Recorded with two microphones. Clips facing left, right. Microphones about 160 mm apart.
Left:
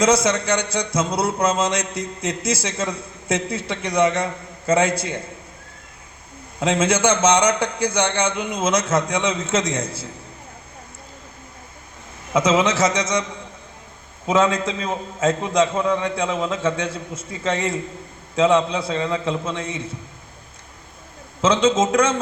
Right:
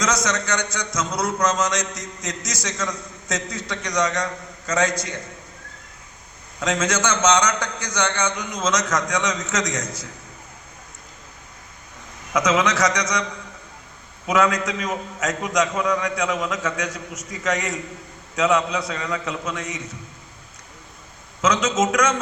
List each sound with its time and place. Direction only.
0.0 s a man's voice: 30° left (ahead or behind)
6.6 s a man's voice: 30° left (ahead or behind)
12.3 s a man's voice: 25° left (ahead or behind)
14.3 s a man's voice: 25° left (ahead or behind)
21.4 s a man's voice: 30° left (ahead or behind)